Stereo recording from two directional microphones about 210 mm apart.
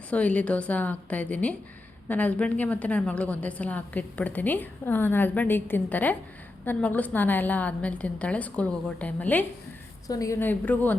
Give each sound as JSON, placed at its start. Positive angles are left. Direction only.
{"t": 0.1, "sound": "a woman's voice", "side_deg": 5}